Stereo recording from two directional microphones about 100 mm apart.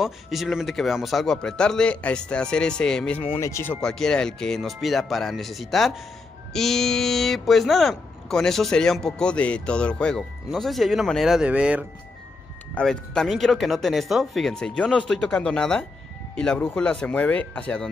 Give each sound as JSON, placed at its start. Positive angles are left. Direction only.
{"t": 0.0, "sound": "speech", "side_deg": -5}
{"t": 3.3, "sound": "speech", "side_deg": 30}
{"t": 3.8, "sound": "speech", "side_deg": 5}
{"t": 11.4, "sound": "speech", "side_deg": -10}
{"t": 12.7, "sound": "speech", "side_deg": 10}